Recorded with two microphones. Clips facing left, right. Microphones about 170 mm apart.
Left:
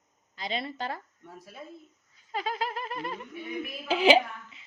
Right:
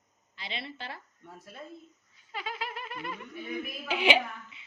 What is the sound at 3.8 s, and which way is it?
Speech, 35° left (ahead or behind).